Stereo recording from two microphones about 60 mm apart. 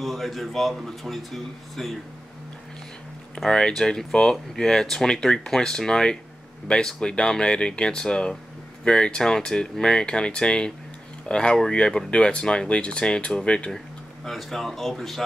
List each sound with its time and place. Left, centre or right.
0.0 s a man's voice: centre
3.4 s speech: centre
14.2 s a man's voice: centre